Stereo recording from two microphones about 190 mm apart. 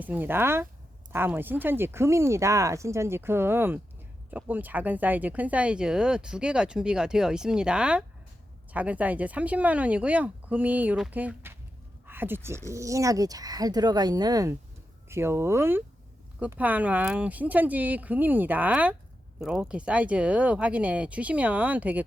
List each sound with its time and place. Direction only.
0.0 s speech: 10° right (ahead or behind)